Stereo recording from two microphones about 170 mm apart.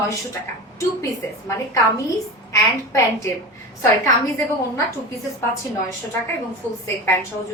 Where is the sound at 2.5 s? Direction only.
20° left (ahead or behind).